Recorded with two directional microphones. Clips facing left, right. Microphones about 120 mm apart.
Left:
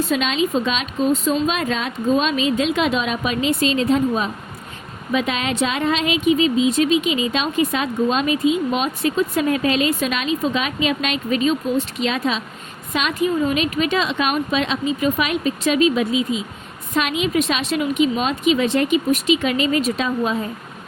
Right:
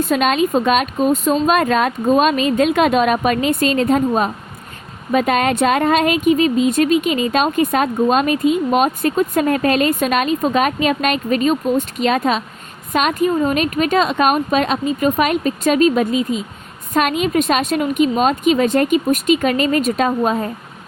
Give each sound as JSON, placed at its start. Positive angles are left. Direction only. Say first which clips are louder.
{"t": 0.0, "sound": "speech", "louder": "right 4 dB", "side_deg": -50}